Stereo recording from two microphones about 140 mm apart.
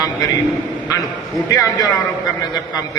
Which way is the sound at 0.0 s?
25° left (ahead or behind).